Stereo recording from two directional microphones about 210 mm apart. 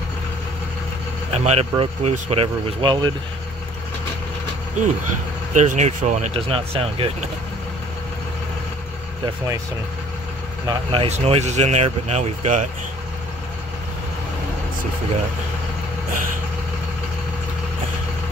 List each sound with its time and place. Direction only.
1.3 s speech: 30° right (ahead or behind)
4.8 s speech: 35° right (ahead or behind)
10.9 s speech: 30° right (ahead or behind)